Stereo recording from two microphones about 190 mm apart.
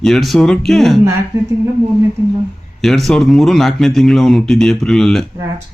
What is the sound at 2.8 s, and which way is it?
Speech, centre (ahead or behind).